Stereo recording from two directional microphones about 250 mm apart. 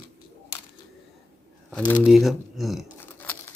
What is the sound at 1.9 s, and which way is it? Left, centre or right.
Speech, centre.